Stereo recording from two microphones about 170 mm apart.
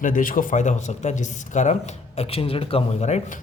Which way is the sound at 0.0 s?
55° left (ahead or behind).